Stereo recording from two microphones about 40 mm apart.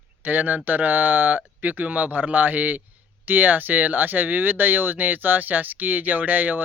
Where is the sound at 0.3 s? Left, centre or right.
Right.